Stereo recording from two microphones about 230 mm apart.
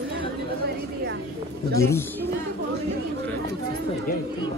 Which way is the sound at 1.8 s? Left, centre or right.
Centre.